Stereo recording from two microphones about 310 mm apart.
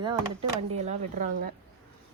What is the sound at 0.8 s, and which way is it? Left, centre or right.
Speech, right.